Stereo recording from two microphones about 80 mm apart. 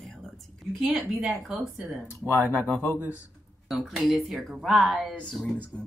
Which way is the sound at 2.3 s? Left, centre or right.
Left.